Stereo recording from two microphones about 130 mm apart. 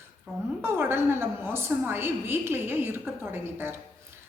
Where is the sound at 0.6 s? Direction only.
20° right (ahead or behind).